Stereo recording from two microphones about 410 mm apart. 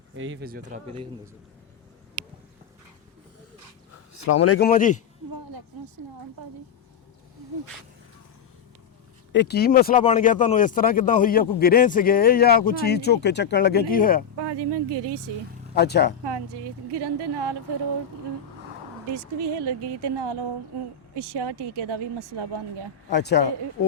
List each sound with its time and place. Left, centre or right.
0.2 s speech: right
4.1 s speech: left
4.6 s speech: centre
9.3 s speech: left
14.3 s speech: right
15.7 s speech: left
16.2 s speech: right
19.1 s speech: right
23.1 s speech: left